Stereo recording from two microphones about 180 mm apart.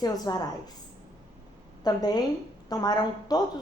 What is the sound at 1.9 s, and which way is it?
A woman's voice, 20° left (ahead or behind).